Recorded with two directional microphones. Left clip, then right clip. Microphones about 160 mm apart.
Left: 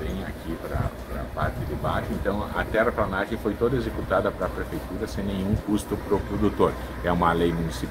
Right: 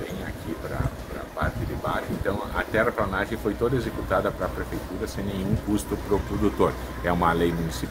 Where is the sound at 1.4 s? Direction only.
20° right (ahead or behind).